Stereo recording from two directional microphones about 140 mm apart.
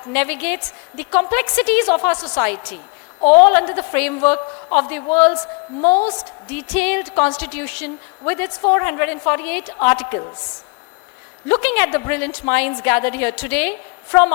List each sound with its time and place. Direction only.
0.1 s a woman's voice: 10° left (ahead or behind)
11.4 s a woman's voice: 10° left (ahead or behind)